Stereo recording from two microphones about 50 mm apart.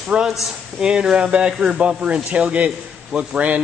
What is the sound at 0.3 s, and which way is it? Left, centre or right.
Speech, centre.